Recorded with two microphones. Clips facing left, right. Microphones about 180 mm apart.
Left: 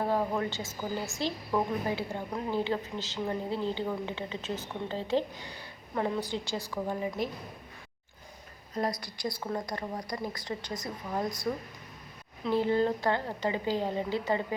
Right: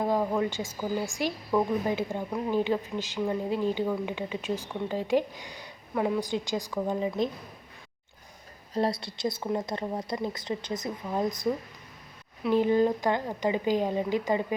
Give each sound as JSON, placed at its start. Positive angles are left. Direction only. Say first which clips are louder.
{"t": 0.0, "sound": "a woman's voice", "louder": "right 3 dB", "side_deg": -10}
{"t": 8.7, "sound": "a woman's voice", "louder": "right 4 dB", "side_deg": -30}